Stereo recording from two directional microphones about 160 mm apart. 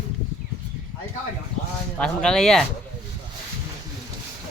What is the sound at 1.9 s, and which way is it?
Speech, 5° left (ahead or behind).